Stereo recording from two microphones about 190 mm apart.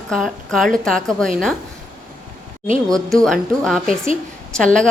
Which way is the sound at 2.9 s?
Centre (ahead or behind).